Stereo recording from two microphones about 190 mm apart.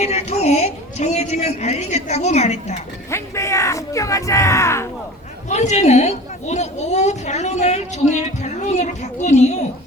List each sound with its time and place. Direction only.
0.0 s a woman's voice: 35° left (ahead or behind)
3.1 s speech: 15° left (ahead or behind)
5.5 s a woman's voice: 35° left (ahead or behind)